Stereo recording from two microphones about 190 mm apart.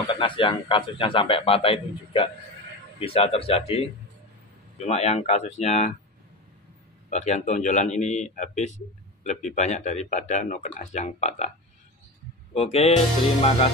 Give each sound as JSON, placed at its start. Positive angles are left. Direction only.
{"t": 0.1, "sound": "a man's voice", "side_deg": 25}
{"t": 4.8, "sound": "speech", "side_deg": 35}
{"t": 7.1, "sound": "speech", "side_deg": 35}
{"t": 12.5, "sound": "speech", "side_deg": 30}